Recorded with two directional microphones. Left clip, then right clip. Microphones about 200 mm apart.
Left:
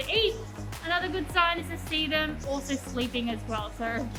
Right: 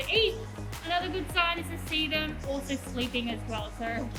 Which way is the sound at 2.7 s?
30° left (ahead or behind).